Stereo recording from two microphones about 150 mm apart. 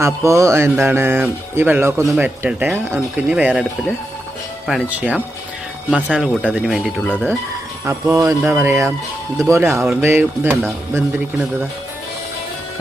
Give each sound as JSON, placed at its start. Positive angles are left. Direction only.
{"t": 0.0, "sound": "speech", "side_deg": -20}
{"t": 7.9, "sound": "speech", "side_deg": -20}